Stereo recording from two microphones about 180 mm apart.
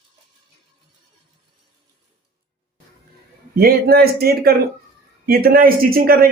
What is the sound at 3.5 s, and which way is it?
Speech, 60° right (ahead or behind).